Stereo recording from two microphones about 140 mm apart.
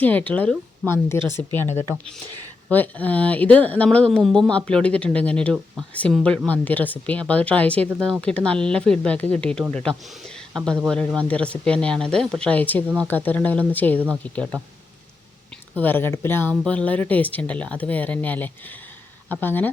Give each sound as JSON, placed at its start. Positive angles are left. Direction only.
{"t": 0.0, "sound": "speech", "side_deg": 10}
{"t": 15.7, "sound": "speech", "side_deg": 15}